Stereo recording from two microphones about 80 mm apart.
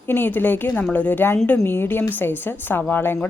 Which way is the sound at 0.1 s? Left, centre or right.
Left.